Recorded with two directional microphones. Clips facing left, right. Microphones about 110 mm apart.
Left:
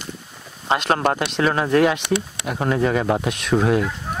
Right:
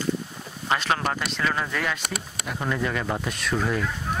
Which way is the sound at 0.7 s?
35° left (ahead or behind).